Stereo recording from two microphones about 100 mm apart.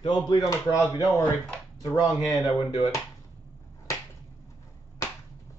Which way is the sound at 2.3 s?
35° left (ahead or behind).